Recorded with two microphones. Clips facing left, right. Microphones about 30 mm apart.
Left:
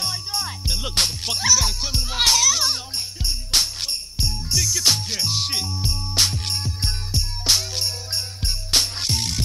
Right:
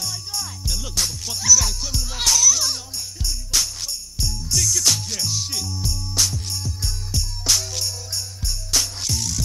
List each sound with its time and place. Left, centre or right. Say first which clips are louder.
0.0 s music: left 3 dB; left
7.2 s music: left 1 dB; left